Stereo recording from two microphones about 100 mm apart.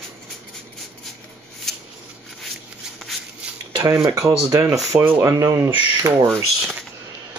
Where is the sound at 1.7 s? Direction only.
5° left (ahead or behind).